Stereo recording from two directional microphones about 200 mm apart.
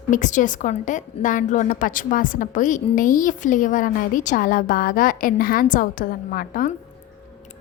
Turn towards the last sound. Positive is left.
turn(degrees=45)  # may be behind; listen again after turning